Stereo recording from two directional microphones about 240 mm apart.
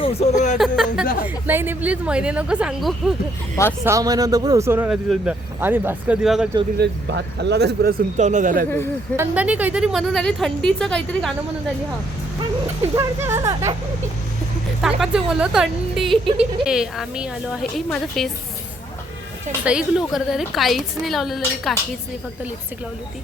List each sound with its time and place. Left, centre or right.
0.0 s speech: left
0.6 s a woman's voice: centre
3.5 s speech: centre
3.8 s a man's voice: centre
6.7 s speech: right
9.1 s a woman's voice: centre
12.9 s a man's voice: centre
14.8 s a woman's voice: centre
19.5 s a woman's voice: centre